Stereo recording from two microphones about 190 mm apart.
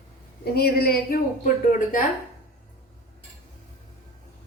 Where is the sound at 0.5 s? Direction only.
55° left (ahead or behind).